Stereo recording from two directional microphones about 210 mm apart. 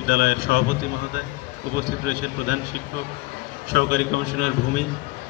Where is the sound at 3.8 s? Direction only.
40° left (ahead or behind).